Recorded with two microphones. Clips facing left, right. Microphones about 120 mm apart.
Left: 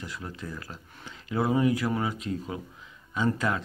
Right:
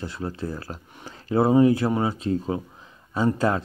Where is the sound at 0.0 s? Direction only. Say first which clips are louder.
Right 8 dB; 30° right (ahead or behind).